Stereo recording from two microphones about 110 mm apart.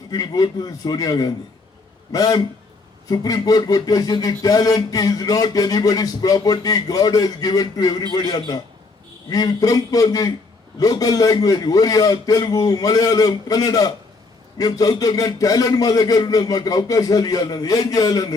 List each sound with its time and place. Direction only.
0.1 s speech: 35° left (ahead or behind)